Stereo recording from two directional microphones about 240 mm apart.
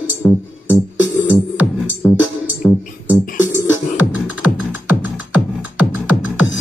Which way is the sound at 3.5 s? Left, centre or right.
Centre.